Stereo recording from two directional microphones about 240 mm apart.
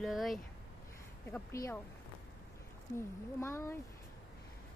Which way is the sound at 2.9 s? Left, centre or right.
Centre.